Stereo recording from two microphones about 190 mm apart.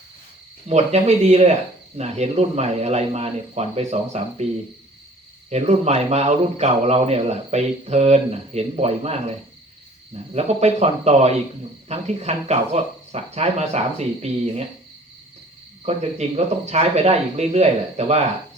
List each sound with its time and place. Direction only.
0.7 s a man's voice: 35° right (ahead or behind)
5.5 s a man's voice: 35° right (ahead or behind)
10.3 s a man's voice: 35° right (ahead or behind)
15.9 s a man's voice: 35° right (ahead or behind)